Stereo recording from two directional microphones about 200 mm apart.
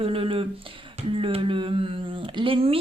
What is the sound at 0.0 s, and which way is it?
A woman's voice, 25° right (ahead or behind).